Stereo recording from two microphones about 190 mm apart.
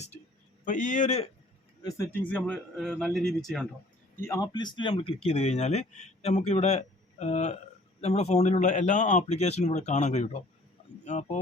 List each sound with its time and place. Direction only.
0.6 s speech: 40° left (ahead or behind)
1.8 s speech: 15° left (ahead or behind)
2.3 s speech: 5° left (ahead or behind)
4.2 s speech: 15° left (ahead or behind); by 11.3 s 35° left (ahead or behind)